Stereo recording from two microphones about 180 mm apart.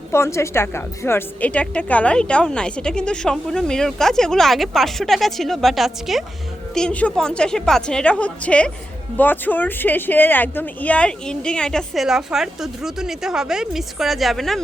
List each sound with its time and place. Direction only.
0.1 s a woman's voice: 15° left (ahead or behind)